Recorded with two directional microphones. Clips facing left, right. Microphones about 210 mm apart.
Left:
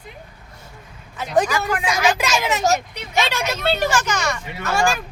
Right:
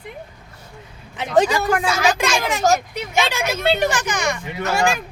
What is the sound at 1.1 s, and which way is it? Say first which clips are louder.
Speech: right 3 dB; 25° right (ahead or behind).